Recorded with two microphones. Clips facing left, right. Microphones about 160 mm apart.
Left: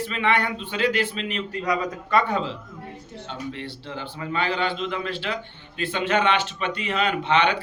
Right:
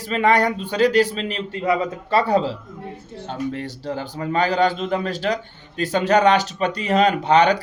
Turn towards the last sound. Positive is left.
turn(degrees=-40)  # may be behind; listen again after turning